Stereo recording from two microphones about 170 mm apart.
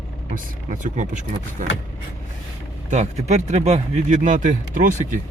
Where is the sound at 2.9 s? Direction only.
45° right (ahead or behind).